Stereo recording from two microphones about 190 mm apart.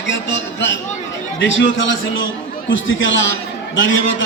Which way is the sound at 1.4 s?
75° left (ahead or behind).